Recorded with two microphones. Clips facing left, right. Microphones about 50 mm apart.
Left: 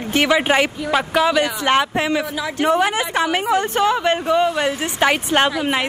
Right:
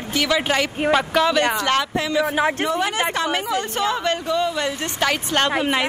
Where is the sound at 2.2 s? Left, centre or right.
Right.